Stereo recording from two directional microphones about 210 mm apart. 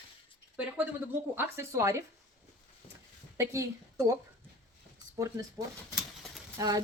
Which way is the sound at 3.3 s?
15° right (ahead or behind).